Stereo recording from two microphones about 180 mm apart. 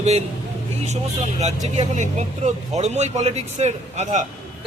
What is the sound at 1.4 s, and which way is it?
A man's voice, 40° right (ahead or behind).